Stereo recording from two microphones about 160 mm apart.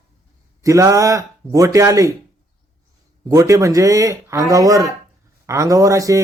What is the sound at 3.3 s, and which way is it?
A man's voice, 20° right (ahead or behind).